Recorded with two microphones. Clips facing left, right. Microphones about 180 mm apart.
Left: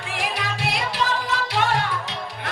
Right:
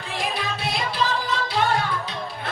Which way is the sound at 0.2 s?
75° left (ahead or behind).